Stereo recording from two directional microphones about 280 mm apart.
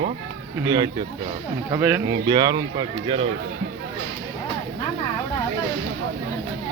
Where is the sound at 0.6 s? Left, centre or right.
Centre.